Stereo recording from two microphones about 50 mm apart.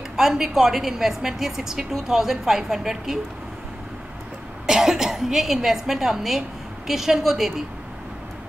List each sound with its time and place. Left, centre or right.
0.1 s a woman's voice: centre
4.6 s a woman's voice: centre